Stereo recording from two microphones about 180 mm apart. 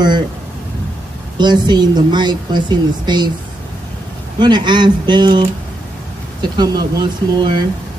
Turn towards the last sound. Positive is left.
turn(degrees=-25)  # may be behind; listen again after turning